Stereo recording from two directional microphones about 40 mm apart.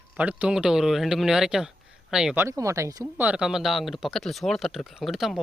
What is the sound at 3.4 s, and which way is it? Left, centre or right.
Speech, centre.